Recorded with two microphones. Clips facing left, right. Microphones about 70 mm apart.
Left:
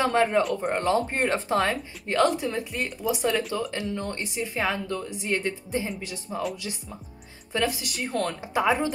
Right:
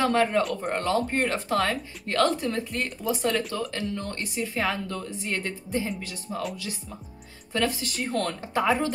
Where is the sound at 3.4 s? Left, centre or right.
Centre.